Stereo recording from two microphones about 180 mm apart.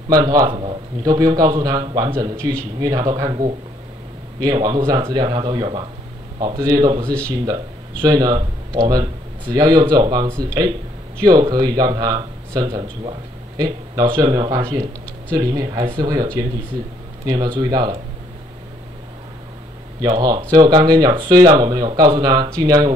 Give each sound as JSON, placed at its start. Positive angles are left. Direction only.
{"t": 0.1, "sound": "a man's voice", "side_deg": -20}
{"t": 2.1, "sound": "a man's voice", "side_deg": -15}
{"t": 8.0, "sound": "a man's voice", "side_deg": -20}
{"t": 20.0, "sound": "a man's voice", "side_deg": -20}